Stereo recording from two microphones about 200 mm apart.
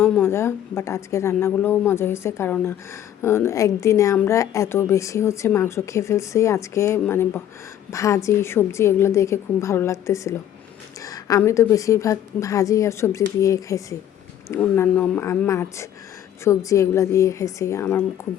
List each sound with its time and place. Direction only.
0.0 s a woman's voice: 10° left (ahead or behind)